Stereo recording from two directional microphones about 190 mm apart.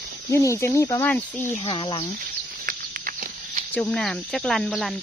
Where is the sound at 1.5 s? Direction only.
25° left (ahead or behind).